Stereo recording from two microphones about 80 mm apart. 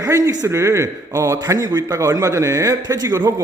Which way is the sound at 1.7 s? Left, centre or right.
Right.